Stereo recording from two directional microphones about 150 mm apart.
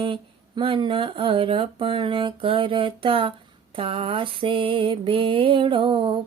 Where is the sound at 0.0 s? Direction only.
35° right (ahead or behind).